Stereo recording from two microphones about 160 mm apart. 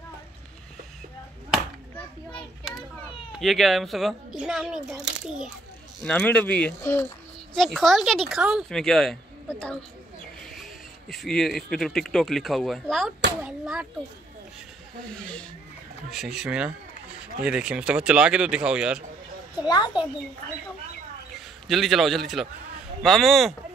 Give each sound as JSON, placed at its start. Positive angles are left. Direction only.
{"t": 3.3, "sound": "speech", "side_deg": 0}
{"t": 6.0, "sound": "speech", "side_deg": 10}
{"t": 7.5, "sound": "speech", "side_deg": 0}
{"t": 15.0, "sound": "speech", "side_deg": 5}
{"t": 19.6, "sound": "a child's voice", "side_deg": 25}
{"t": 21.6, "sound": "speech", "side_deg": 0}